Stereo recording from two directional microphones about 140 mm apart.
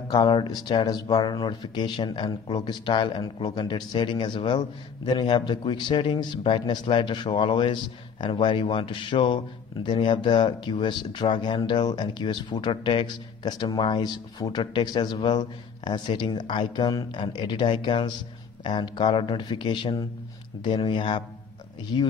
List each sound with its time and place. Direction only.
0.1 s speech: 35° left (ahead or behind)